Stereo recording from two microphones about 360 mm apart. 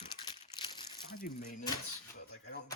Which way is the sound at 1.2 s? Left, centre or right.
Left.